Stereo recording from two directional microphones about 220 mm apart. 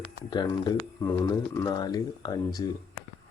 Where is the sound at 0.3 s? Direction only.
20° left (ahead or behind).